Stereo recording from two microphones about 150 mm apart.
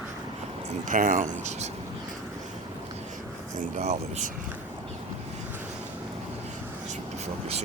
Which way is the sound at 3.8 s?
50° right (ahead or behind).